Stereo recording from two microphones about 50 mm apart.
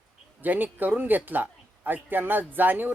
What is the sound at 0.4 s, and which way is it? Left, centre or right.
A man's voice, right.